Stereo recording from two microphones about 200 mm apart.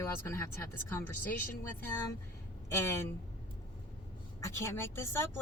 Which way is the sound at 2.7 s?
15° left (ahead or behind).